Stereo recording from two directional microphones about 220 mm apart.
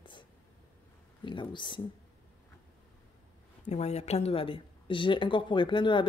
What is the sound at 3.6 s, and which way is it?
A man's voice, 30° left (ahead or behind).